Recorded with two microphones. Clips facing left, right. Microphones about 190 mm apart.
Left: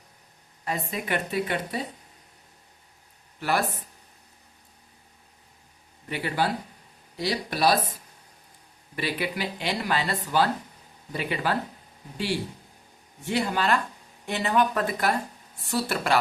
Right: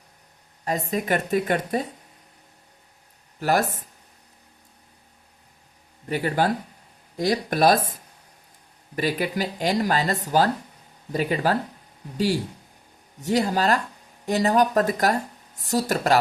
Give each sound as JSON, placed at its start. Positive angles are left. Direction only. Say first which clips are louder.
{"t": 0.6, "sound": "speech", "louder": "right 5 dB", "side_deg": -40}
{"t": 3.4, "sound": "speech", "louder": "right 4 dB", "side_deg": -40}
{"t": 6.1, "sound": "speech", "louder": "right 4 dB", "side_deg": -45}
{"t": 9.0, "sound": "speech", "louder": "right 5 dB", "side_deg": -40}